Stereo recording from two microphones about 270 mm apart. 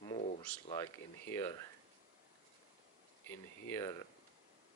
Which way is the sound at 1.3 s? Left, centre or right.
Centre.